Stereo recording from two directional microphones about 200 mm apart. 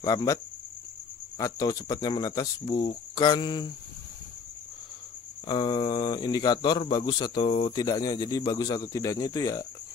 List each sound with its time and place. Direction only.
0.0 s speech: 20° left (ahead or behind)
1.4 s speech: 20° left (ahead or behind)
5.5 s speech: 25° left (ahead or behind)